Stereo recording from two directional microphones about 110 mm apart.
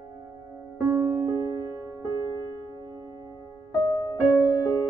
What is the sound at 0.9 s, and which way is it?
Music, 25° right (ahead or behind).